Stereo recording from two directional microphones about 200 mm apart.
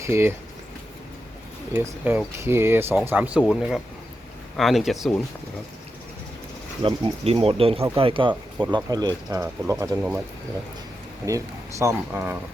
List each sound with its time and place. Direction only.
0.0 s speech: 15° right (ahead or behind)
1.7 s speech: 10° right (ahead or behind)
6.8 s speech: 25° right (ahead or behind)
11.3 s speech: 15° right (ahead or behind)